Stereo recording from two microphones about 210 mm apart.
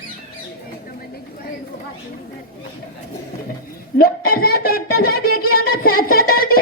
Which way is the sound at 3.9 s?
45° left (ahead or behind).